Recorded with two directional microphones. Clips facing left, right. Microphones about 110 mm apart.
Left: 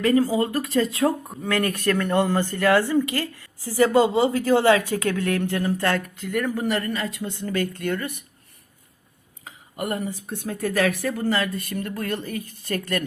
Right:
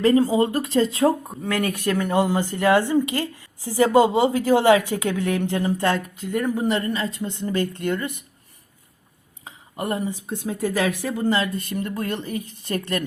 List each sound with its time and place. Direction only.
0.0 s speech: 25° right (ahead or behind)
1.4 s speech: 5° right (ahead or behind)
1.7 s speech: 15° right (ahead or behind)
9.4 s a sound: 30° right (ahead or behind)
10.2 s speech: 20° right (ahead or behind)